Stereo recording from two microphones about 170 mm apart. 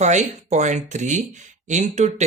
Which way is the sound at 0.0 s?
45° right (ahead or behind).